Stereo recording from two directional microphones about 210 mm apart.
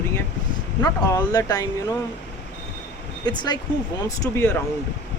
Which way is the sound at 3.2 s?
20° left (ahead or behind).